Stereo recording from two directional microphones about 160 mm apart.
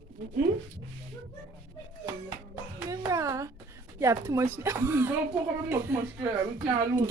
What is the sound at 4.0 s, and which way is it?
Speech, 20° right (ahead or behind).